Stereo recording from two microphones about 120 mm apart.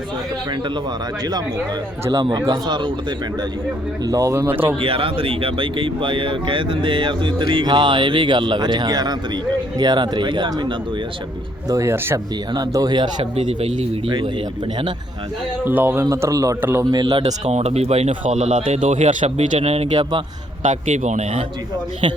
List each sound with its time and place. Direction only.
2.5 s speech: 40° right (ahead or behind)
4.0 s speech: 30° right (ahead or behind)
4.6 s speech: 50° right (ahead or behind)
11.7 s speech: 20° right (ahead or behind)
12.5 s speech: 35° right (ahead or behind)
13.3 s speech: 55° right (ahead or behind)
15.6 s speech: 15° right (ahead or behind)
16.9 s speech: 45° right (ahead or behind)
17.2 s speech: 70° right (ahead or behind)
19.9 s speech: 40° right (ahead or behind)
20.6 s a man's voice: 85° right